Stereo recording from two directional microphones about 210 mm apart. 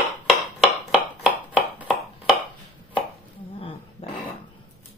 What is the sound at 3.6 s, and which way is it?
Roaring cats, 25° left (ahead or behind).